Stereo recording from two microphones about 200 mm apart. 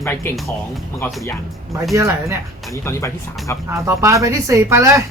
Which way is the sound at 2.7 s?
15° left (ahead or behind).